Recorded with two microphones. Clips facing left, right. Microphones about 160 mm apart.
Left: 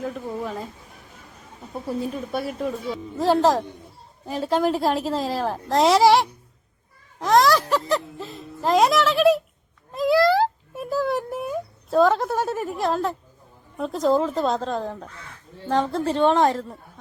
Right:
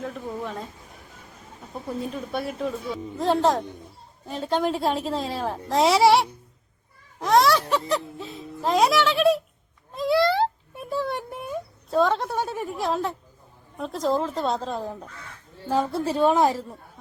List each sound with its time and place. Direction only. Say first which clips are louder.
0.0 s a woman's voice: left 3 dB; centre (ahead or behind)
1.7 s a woman's voice: left 3 dB; 5° left (ahead or behind)
9.9 s a sound: left 3 dB; centre (ahead or behind)
13.7 s a woman's voice: left 4 dB; centre (ahead or behind)